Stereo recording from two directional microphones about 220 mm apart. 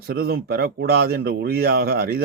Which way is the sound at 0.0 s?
45° right (ahead or behind).